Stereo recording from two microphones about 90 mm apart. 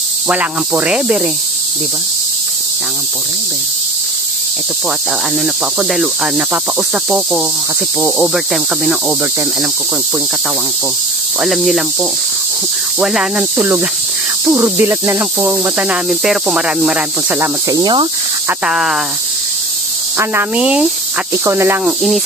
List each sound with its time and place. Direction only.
0.3 s speech: 15° right (ahead or behind)
5.9 s speech: 5° right (ahead or behind)
11.4 s speech: centre (ahead or behind)
14.8 s snake: 25° right (ahead or behind)
15.6 s speech: 15° right (ahead or behind)
16.1 s speech: 5° right (ahead or behind)
17.4 s speech: 35° right (ahead or behind)
18.7 s speech: 5° right (ahead or behind)
20.5 s speech: 10° right (ahead or behind)
21.5 s speech: 30° right (ahead or behind)
21.8 s speech: centre (ahead or behind)